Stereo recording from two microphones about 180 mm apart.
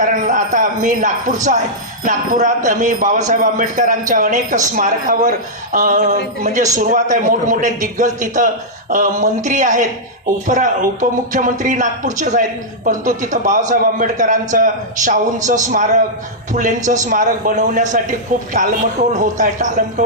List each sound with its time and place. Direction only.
0.0 s speech: 45° right (ahead or behind)